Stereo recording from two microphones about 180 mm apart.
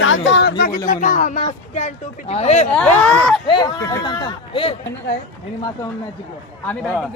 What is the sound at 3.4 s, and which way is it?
Speech, 25° left (ahead or behind).